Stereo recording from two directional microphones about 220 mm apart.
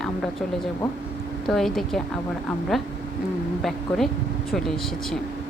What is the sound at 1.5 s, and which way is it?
Speech, centre (ahead or behind).